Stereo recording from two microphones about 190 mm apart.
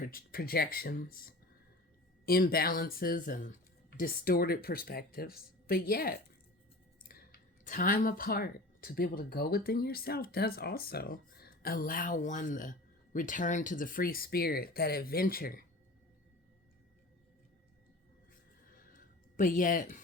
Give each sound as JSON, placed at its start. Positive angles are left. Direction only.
{"t": 0.0, "sound": "speech", "side_deg": 50}
{"t": 7.6, "sound": "speech", "side_deg": 45}
{"t": 18.9, "sound": "a sound", "side_deg": 45}